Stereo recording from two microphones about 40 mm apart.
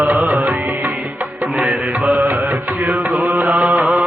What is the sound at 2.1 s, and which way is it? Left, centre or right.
Music, right.